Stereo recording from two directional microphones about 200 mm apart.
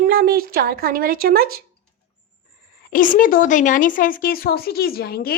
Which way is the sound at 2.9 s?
45° left (ahead or behind).